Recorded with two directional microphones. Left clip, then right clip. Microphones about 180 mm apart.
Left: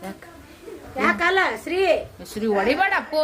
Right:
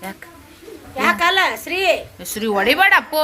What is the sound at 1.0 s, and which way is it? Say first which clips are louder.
A woman's voice: right 4 dB; 30° left (ahead or behind).